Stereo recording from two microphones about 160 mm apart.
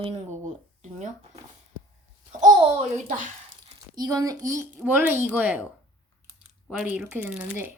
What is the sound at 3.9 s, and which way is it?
Speech, 25° right (ahead or behind).